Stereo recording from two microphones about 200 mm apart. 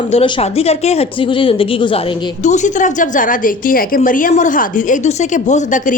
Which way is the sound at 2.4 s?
35° left (ahead or behind).